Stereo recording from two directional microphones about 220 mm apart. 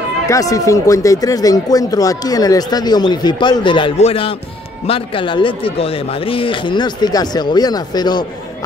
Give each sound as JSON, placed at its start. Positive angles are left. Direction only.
{"t": 0.3, "sound": "speech", "side_deg": 15}